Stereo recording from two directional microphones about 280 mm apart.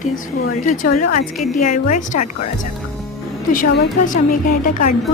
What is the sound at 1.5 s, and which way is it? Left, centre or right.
Speech, left.